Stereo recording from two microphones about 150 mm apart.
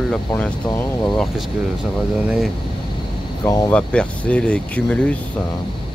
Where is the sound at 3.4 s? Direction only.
25° left (ahead or behind).